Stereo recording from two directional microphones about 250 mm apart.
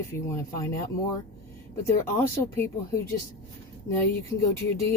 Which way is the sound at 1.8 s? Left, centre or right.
Centre.